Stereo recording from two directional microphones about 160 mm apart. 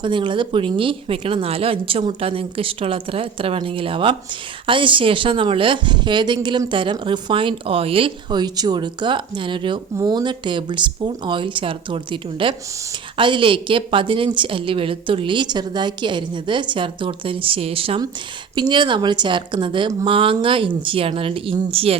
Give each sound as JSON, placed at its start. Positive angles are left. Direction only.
{"t": 0.0, "sound": "a woman's voice", "side_deg": -30}